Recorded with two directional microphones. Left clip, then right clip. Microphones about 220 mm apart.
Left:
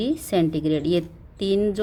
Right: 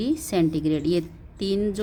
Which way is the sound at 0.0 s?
10° left (ahead or behind).